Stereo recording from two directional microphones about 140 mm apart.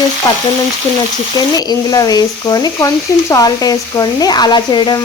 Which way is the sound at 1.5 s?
25° left (ahead or behind).